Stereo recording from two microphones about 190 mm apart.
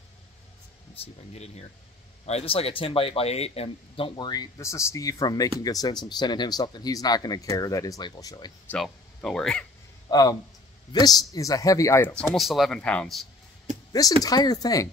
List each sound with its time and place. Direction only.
1.3 s speech: 35° left (ahead or behind)
8.6 s speech: 5° left (ahead or behind)
10.0 s a sound: 20° left (ahead or behind)
10.9 s a man's voice: 20° left (ahead or behind)
12.1 s speech: 5° left (ahead or behind)
14.2 s speech: 20° left (ahead or behind)